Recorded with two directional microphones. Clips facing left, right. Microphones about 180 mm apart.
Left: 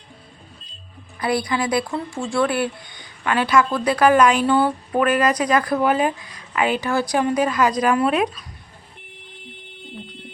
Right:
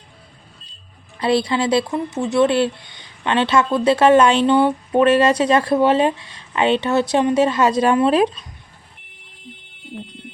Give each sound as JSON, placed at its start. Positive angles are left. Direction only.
{"t": 1.2, "sound": "speech", "side_deg": -25}